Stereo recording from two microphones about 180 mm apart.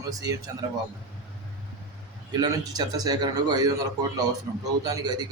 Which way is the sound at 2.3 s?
20° right (ahead or behind).